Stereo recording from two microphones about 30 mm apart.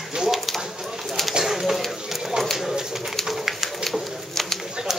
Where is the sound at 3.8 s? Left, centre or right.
Centre.